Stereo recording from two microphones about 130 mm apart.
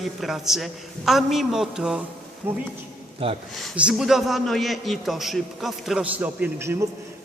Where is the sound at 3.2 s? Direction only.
45° right (ahead or behind).